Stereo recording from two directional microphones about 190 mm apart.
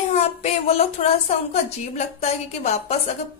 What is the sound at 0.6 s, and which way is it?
A woman's voice, 30° left (ahead or behind).